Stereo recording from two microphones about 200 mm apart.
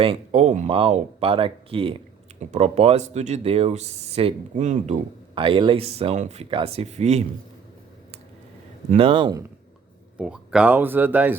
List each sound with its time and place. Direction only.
0.0 s speech: 30° right (ahead or behind)
5.3 s speech: 25° right (ahead or behind)
8.9 s speech: 30° right (ahead or behind)
10.2 s speech: 5° right (ahead or behind)